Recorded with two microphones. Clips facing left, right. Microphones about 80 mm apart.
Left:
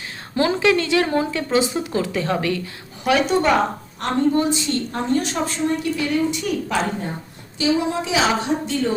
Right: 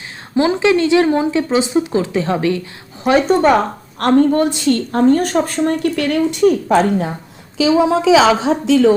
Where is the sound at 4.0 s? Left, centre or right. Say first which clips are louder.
Right 7 dB; right.